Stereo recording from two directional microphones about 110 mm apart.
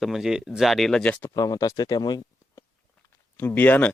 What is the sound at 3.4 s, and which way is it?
Speech, 20° left (ahead or behind).